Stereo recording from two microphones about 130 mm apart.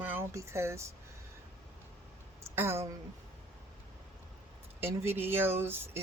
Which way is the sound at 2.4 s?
20° right (ahead or behind).